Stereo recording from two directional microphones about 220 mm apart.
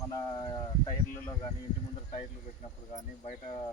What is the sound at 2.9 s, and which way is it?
Speech, 30° left (ahead or behind).